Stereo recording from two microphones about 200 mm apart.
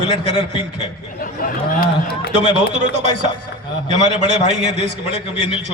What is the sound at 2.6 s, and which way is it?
A man's voice, 35° right (ahead or behind).